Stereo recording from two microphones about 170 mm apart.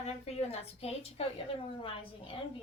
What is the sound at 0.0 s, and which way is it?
A woman's voice, 40° left (ahead or behind).